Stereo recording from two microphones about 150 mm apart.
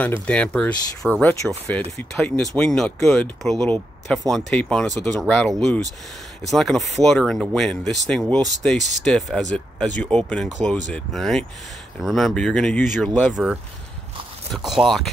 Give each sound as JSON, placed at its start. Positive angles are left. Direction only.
{"t": 0.0, "sound": "speech", "side_deg": 10}
{"t": 1.2, "sound": "speech", "side_deg": 20}
{"t": 14.5, "sound": "speech", "side_deg": 0}